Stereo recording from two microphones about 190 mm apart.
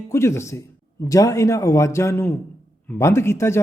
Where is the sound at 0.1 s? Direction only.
15° left (ahead or behind).